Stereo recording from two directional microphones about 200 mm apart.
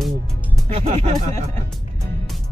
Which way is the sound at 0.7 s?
30° right (ahead or behind).